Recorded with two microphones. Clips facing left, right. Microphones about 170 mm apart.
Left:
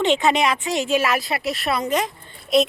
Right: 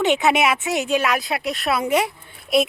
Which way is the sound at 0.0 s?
Centre (ahead or behind).